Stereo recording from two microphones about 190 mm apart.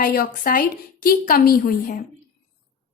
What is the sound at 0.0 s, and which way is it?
A woman's voice, 50° left (ahead or behind).